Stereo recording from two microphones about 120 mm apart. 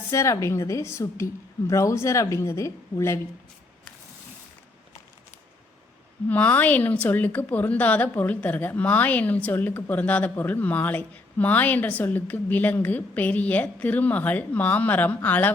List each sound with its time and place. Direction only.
0.1 s a woman's voice: 25° left (ahead or behind)
6.2 s a woman's voice: 15° left (ahead or behind)